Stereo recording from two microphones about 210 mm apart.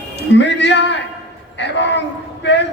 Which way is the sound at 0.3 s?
55° left (ahead or behind).